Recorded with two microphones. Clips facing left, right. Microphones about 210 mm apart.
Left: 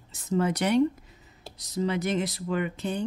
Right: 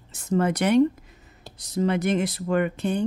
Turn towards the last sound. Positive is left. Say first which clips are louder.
# right 5 dB
turn(degrees=-55)  # may be behind; listen again after turning